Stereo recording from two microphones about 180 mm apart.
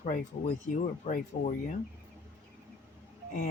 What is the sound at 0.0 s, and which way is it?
Speech, 45° left (ahead or behind).